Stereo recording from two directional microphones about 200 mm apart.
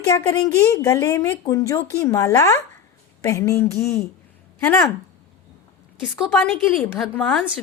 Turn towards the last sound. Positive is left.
turn(degrees=5)  # may be behind; listen again after turning